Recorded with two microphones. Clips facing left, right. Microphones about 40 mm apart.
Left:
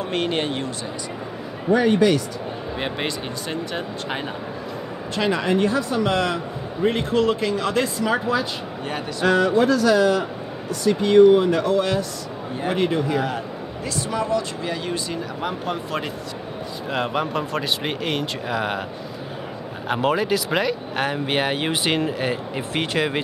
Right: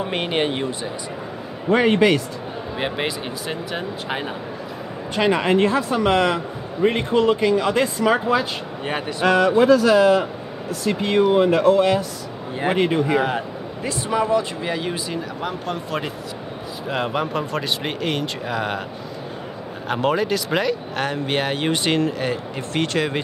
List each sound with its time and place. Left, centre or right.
0.0 s a man's voice: centre
1.7 s speech: right
2.8 s a man's voice: centre
5.1 s a man's voice: right
8.8 s speech: right
9.3 s a man's voice: centre
15.4 s speech: centre
19.9 s speech: centre